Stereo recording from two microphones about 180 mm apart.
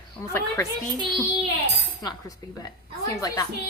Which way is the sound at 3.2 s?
20° left (ahead or behind).